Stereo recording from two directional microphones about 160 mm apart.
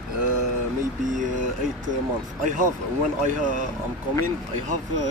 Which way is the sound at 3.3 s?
55° right (ahead or behind).